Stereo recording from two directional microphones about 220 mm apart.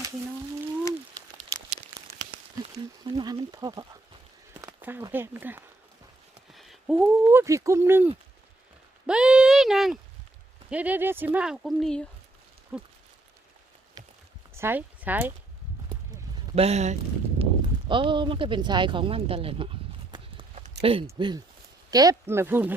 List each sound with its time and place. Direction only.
3.0 s speech: 20° right (ahead or behind); by 12.9 s centre (ahead or behind)
14.0 s a sound: 20° right (ahead or behind)
14.5 s speech: 10° right (ahead or behind)
16.6 s speech: 30° right (ahead or behind); by 22.7 s 10° right (ahead or behind)